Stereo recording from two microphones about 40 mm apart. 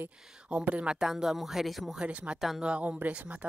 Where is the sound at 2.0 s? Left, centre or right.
Right.